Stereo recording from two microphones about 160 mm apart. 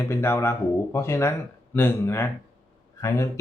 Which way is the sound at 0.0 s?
15° left (ahead or behind).